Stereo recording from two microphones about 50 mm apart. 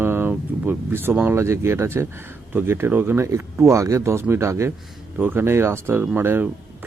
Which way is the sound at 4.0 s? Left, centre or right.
Right.